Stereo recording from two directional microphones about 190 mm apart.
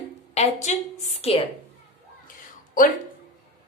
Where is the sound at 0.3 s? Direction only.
35° left (ahead or behind).